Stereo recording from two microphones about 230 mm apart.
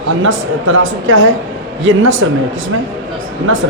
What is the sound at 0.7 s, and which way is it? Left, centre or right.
Speech, right.